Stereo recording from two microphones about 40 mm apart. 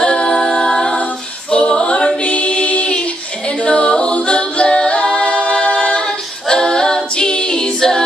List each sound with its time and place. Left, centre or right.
0.0 s a capella: left
2.2 s female singing: left
5.5 s a capella: left